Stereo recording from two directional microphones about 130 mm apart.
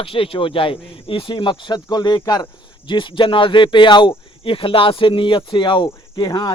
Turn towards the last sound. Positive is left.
turn(degrees=30)  # may be behind; listen again after turning